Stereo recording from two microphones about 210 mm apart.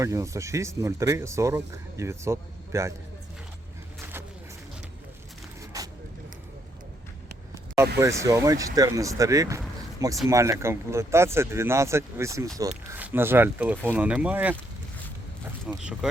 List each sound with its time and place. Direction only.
0.0 s speech: 15° right (ahead or behind)
5.7 s vehicle: 15° right (ahead or behind)
7.9 s speech: 15° right (ahead or behind)
15.8 s speech: 5° right (ahead or behind)